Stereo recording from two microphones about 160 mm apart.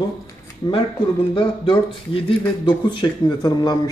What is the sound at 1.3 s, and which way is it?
A man's voice, 35° left (ahead or behind).